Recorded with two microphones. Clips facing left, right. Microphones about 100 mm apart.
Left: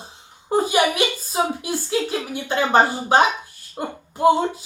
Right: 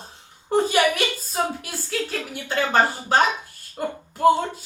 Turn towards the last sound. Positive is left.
turn(degrees=15)  # may be behind; listen again after turning